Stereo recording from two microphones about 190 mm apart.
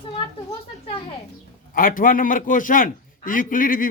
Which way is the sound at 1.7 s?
45° left (ahead or behind).